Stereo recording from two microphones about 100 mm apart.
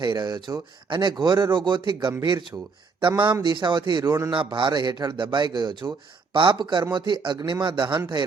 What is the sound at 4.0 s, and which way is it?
Speech, 25° right (ahead or behind).